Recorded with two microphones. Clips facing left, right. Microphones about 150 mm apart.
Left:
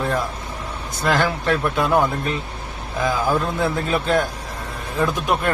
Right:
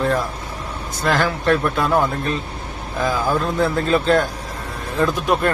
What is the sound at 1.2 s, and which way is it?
Speech, 15° left (ahead or behind).